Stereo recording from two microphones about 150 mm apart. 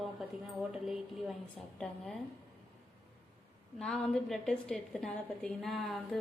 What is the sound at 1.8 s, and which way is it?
Speech, 10° left (ahead or behind).